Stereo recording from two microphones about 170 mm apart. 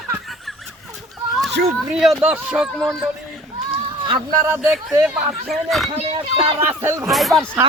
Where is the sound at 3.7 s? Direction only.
30° right (ahead or behind).